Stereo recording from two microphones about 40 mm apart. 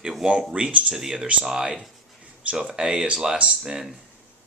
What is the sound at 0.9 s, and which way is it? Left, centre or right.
Speech, centre.